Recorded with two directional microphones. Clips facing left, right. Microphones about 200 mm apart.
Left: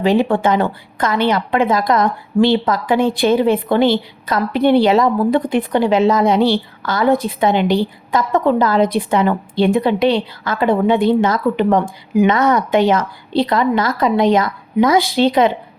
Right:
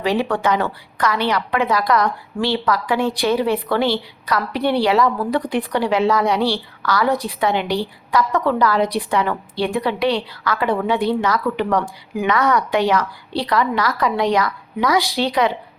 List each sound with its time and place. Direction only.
0.0 s a woman's voice: 20° left (ahead or behind)